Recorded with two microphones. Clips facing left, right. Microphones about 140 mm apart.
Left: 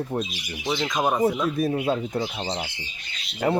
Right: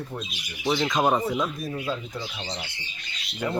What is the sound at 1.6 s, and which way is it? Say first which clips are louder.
Speech: left 7 dB; 60° left (ahead or behind).